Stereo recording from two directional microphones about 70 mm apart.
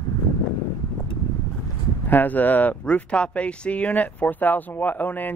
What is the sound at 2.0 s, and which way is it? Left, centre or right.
Speech, left.